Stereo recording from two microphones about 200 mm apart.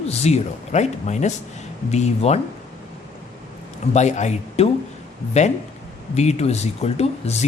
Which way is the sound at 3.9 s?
35° left (ahead or behind).